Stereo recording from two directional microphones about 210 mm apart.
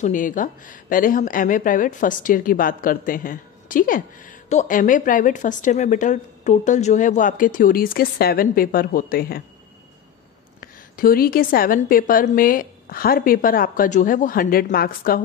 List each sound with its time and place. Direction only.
0.0 s speech: 40° left (ahead or behind)
10.6 s a woman's voice: 45° left (ahead or behind)